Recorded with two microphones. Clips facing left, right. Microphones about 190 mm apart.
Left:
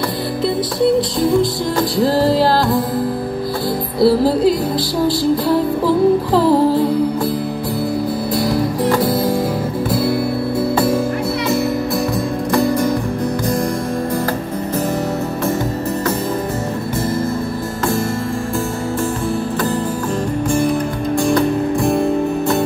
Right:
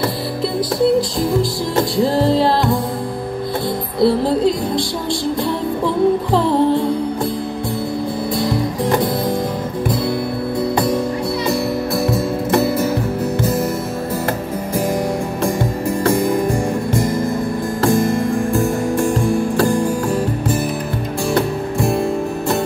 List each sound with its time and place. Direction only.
2.0 s music: centre (ahead or behind)
4.0 s music: 5° left (ahead or behind)
8.4 s music: 5° left (ahead or behind)
12.6 s music: 5° right (ahead or behind)
17.8 s music: 15° right (ahead or behind)